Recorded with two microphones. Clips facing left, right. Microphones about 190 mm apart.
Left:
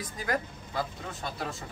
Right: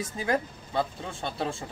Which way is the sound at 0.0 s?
25° right (ahead or behind).